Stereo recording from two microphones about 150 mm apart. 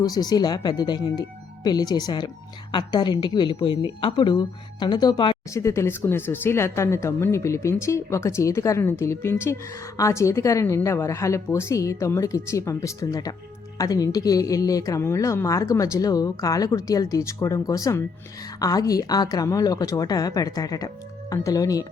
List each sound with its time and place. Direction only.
0.0 s a woman's voice: 25° left (ahead or behind)
5.5 s speech: 20° left (ahead or behind)